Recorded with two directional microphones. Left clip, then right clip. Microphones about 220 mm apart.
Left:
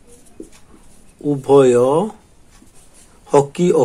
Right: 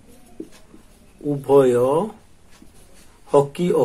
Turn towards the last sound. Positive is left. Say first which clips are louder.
# left 3 dB
turn(degrees=25)  # may be behind; listen again after turning